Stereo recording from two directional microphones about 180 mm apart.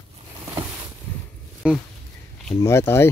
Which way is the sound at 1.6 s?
5° right (ahead or behind).